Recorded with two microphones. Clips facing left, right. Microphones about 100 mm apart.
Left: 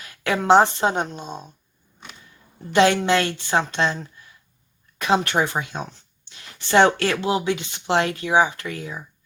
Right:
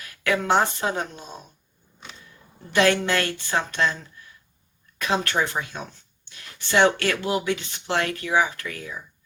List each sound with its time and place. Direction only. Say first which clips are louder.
0.3 s speech: left 5 dB; 25° left (ahead or behind)
2.7 s speech: left 3 dB; 20° left (ahead or behind)